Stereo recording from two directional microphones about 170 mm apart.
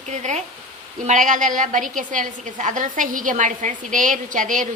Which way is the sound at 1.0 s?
50° right (ahead or behind).